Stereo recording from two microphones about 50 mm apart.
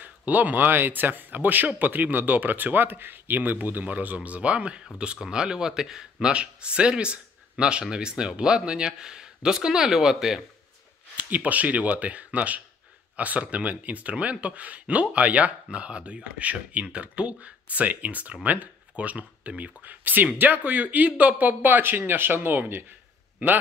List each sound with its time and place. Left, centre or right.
0.0 s speech: right; by 10.4 s centre
11.1 s speech: right